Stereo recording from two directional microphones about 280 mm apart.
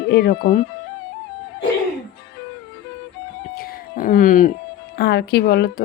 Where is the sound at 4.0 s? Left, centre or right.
Left.